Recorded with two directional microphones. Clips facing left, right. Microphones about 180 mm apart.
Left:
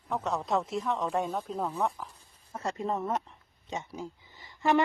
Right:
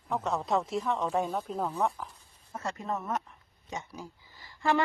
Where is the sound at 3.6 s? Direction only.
20° left (ahead or behind).